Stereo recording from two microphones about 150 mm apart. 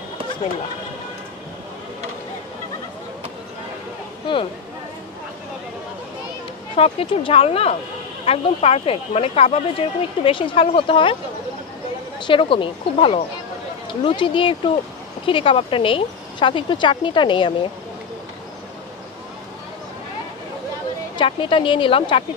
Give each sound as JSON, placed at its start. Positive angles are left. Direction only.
{"t": 6.8, "sound": "speech", "side_deg": 40}
{"t": 12.3, "sound": "speech", "side_deg": 35}
{"t": 21.2, "sound": "speech", "side_deg": 35}